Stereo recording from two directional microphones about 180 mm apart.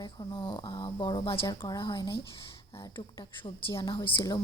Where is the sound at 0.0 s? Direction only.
25° left (ahead or behind).